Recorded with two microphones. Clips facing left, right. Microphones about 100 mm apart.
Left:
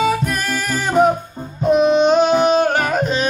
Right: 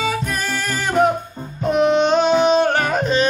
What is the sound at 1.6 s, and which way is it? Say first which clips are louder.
Music: left 3 dB; 15° left (ahead or behind).